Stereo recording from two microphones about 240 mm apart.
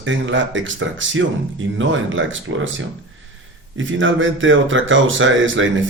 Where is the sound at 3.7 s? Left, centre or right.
Right.